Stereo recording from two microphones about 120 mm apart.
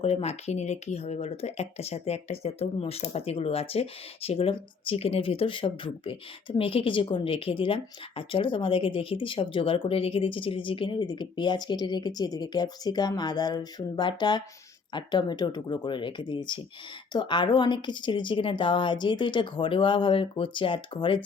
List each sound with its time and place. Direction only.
0.0 s a woman's voice: 60° left (ahead or behind)